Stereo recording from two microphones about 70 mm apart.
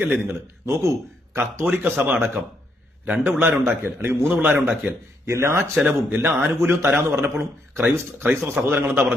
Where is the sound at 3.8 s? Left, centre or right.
Right.